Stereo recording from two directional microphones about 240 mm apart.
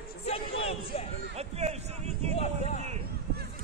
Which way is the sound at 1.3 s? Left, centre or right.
Right.